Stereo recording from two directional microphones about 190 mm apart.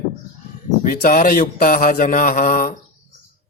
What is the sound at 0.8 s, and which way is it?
Speech, 50° left (ahead or behind).